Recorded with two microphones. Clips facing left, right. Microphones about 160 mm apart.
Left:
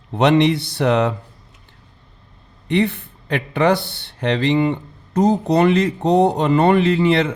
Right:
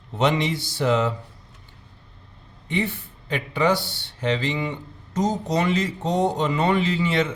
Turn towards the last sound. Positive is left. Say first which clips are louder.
# left 7 dB
turn(degrees=60)  # may be behind; listen again after turning